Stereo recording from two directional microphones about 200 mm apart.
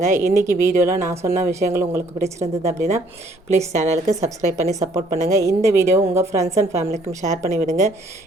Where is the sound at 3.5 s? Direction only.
35° right (ahead or behind).